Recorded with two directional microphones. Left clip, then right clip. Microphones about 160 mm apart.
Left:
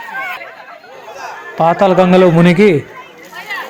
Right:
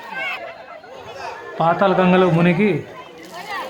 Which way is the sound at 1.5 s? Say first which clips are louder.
Left 6 dB; 40° left (ahead or behind).